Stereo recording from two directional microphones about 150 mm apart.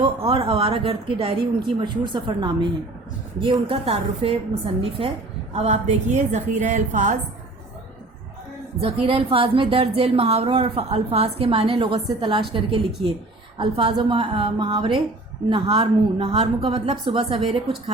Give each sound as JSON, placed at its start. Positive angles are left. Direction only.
{"t": 0.0, "sound": "a woman's voice", "side_deg": -40}
{"t": 8.8, "sound": "a woman's voice", "side_deg": -40}
{"t": 13.6, "sound": "a woman's voice", "side_deg": -35}